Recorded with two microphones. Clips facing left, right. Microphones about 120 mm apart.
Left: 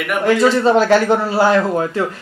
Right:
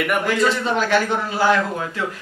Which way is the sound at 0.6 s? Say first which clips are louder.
Left 7 dB; 35° left (ahead or behind).